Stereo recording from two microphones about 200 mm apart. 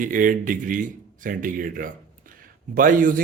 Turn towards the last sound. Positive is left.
turn(degrees=-45)  # may be behind; listen again after turning